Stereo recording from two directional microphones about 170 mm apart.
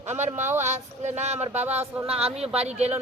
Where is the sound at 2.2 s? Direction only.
35° right (ahead or behind).